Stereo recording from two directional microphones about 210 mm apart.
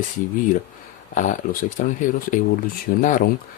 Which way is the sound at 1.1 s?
35° left (ahead or behind).